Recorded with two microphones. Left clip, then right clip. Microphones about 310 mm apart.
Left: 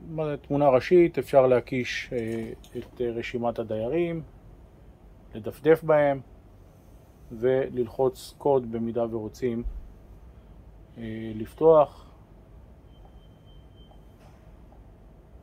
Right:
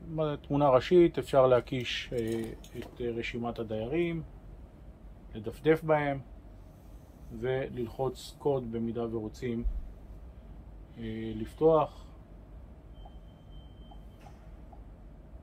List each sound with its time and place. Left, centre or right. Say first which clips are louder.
0.1 s speech: left 3 dB; centre
5.3 s speech: left 6 dB; centre
7.3 s speech: left 9 dB; centre
11.0 s speech: left 3 dB; centre